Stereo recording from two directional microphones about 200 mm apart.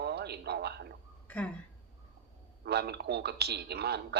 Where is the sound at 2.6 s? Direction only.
55° right (ahead or behind).